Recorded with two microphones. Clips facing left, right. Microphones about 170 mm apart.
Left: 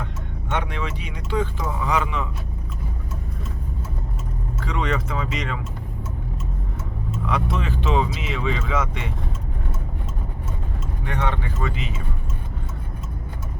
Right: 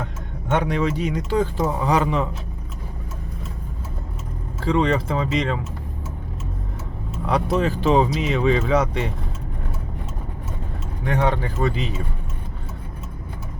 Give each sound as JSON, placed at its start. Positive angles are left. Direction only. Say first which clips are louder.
{"t": 0.5, "sound": "speech", "louder": "right 7 dB", "side_deg": -40}
{"t": 4.6, "sound": "speech", "louder": "right 7 dB", "side_deg": -30}
{"t": 7.3, "sound": "speech", "louder": "right 6 dB", "side_deg": -35}
{"t": 11.0, "sound": "speech", "louder": "right 6 dB", "side_deg": -40}